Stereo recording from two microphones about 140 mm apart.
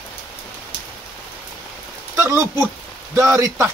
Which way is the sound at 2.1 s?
20° right (ahead or behind).